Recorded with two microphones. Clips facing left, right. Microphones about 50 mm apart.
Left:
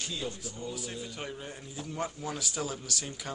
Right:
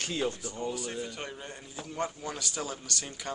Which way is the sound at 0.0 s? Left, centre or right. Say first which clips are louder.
Right 5 dB; right.